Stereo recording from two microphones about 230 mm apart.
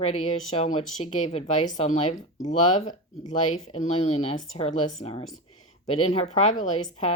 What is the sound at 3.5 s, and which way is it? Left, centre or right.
Speech, left.